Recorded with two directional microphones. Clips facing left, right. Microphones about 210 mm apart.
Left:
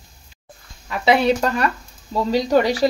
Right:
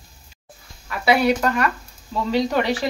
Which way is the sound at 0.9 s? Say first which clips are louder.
Left 1 dB; 25° left (ahead or behind).